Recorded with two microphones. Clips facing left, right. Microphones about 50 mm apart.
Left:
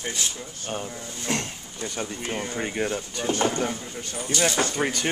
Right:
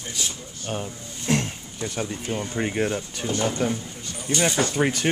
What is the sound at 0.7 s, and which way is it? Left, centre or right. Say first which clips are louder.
Speech: right 1 dB; centre.